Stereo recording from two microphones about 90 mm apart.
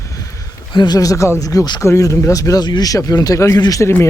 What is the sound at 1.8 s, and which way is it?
Speech, 35° left (ahead or behind).